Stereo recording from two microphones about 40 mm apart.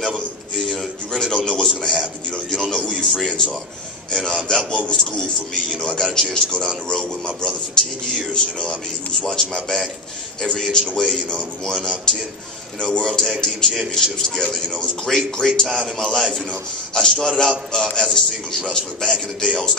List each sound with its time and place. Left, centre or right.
0.7 s a sound: centre
1.6 s a man's voice: centre
10.4 s a man's voice: centre